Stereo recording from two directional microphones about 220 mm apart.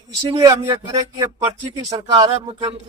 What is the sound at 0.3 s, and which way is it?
A man's voice, 15° right (ahead or behind).